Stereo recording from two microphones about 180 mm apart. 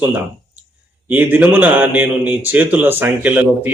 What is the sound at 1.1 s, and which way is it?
A man's voice, 10° right (ahead or behind).